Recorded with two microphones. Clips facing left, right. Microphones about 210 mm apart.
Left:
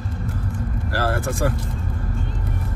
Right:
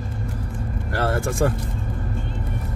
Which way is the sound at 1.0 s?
25° right (ahead or behind).